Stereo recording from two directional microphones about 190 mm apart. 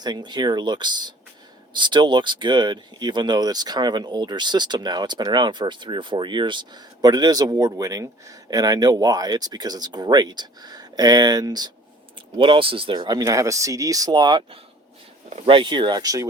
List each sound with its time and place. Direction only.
0.0 s speech: 20° right (ahead or behind)